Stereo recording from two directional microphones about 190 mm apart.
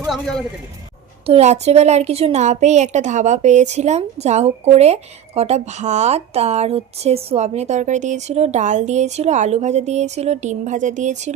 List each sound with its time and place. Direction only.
0.1 s speech: centre (ahead or behind)
1.3 s a woman's voice: 35° right (ahead or behind)